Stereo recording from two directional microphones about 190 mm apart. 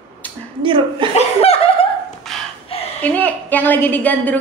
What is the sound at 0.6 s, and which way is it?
Speech, 25° right (ahead or behind).